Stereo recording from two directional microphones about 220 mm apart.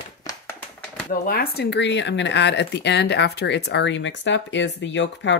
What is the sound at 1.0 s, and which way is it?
Speech, 45° left (ahead or behind).